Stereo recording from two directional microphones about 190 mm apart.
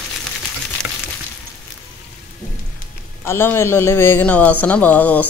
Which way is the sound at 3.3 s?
15° left (ahead or behind).